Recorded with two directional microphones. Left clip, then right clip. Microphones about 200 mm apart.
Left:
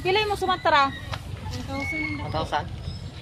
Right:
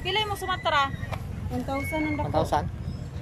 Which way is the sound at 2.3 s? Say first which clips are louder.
Right 2 dB; 20° right (ahead or behind).